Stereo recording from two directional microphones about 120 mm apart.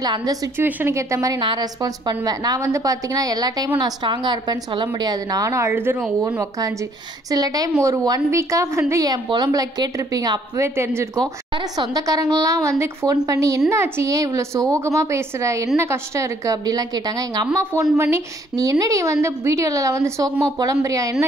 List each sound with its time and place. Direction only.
0.0 s a woman's voice: 35° right (ahead or behind)
0.6 s a woman's voice: 15° right (ahead or behind)
7.2 s a woman's voice: 30° right (ahead or behind)
10.8 s a woman's voice: 20° right (ahead or behind)
11.1 s a woman's voice: 35° right (ahead or behind)